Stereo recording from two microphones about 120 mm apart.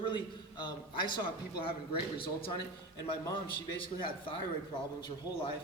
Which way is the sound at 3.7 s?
45° left (ahead or behind).